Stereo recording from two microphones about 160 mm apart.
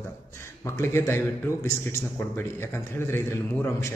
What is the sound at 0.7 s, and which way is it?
A man's voice, 15° left (ahead or behind).